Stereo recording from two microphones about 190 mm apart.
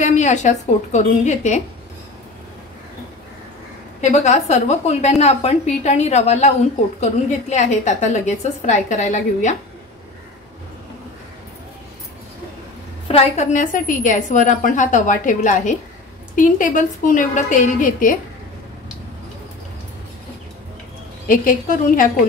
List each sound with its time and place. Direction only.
0.0 s a woman's voice: 40° left (ahead or behind)
4.0 s a woman's voice: 40° left (ahead or behind)
13.1 s a woman's voice: 35° left (ahead or behind)
21.3 s a woman's voice: 45° left (ahead or behind)